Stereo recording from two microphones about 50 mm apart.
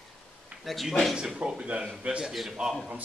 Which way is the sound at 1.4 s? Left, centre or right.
Right.